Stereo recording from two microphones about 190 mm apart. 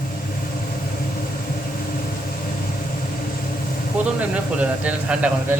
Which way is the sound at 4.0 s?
5° right (ahead or behind).